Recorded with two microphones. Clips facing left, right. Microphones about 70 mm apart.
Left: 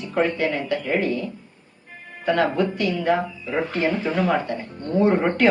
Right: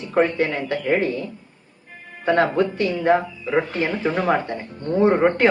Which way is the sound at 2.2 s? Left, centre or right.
Right.